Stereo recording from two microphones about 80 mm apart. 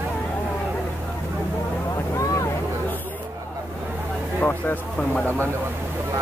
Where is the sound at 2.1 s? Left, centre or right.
Left.